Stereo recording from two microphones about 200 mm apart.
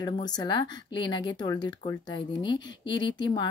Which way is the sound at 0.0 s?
20° left (ahead or behind).